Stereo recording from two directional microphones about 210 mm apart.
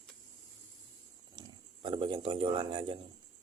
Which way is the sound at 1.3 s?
20° right (ahead or behind).